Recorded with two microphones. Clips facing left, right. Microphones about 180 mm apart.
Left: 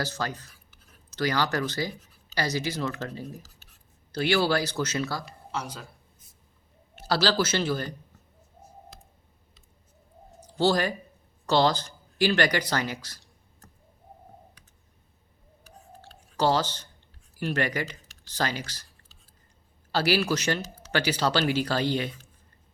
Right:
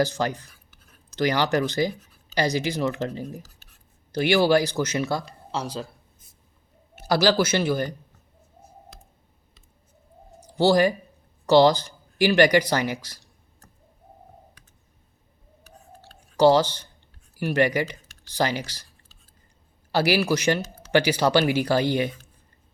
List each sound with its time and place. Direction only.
0.0 s speech: 15° right (ahead or behind)
5.2 s speech: 30° right (ahead or behind)
6.9 s speech: 15° right (ahead or behind)
10.4 s speech: 15° right (ahead or behind)
16.0 s clicking: 10° right (ahead or behind)
17.3 s speech: 10° right (ahead or behind)
19.9 s speech: 15° right (ahead or behind)